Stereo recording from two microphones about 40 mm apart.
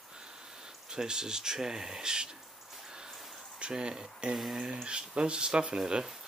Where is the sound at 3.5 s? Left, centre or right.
Right.